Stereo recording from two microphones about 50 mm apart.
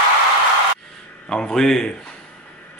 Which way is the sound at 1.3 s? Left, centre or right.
Centre.